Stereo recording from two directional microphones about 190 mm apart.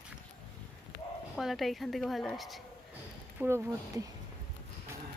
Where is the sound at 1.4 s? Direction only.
Centre (ahead or behind).